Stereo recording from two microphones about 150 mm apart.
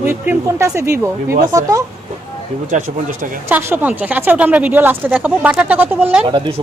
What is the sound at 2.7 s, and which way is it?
Speech, 55° right (ahead or behind).